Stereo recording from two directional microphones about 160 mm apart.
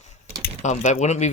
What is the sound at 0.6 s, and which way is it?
Speech, 50° left (ahead or behind).